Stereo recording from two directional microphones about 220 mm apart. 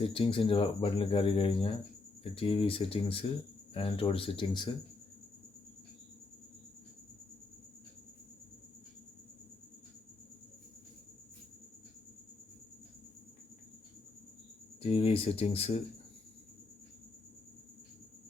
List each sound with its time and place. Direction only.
0.0 s speech: 25° left (ahead or behind)
14.8 s speech: 25° left (ahead or behind)